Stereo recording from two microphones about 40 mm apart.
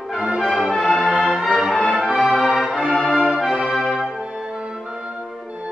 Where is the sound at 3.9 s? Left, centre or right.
Centre.